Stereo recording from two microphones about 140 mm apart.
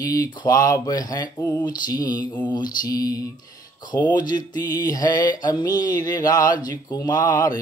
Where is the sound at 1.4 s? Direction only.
15° left (ahead or behind).